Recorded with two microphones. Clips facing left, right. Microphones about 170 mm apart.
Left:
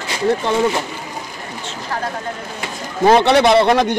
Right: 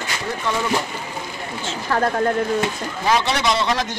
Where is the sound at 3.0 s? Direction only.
55° left (ahead or behind).